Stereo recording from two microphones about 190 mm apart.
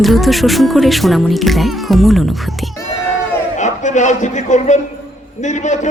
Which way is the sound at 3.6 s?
40° left (ahead or behind).